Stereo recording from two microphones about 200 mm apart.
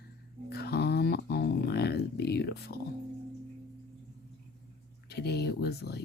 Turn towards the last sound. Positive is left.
turn(degrees=55)  # may be behind; listen again after turning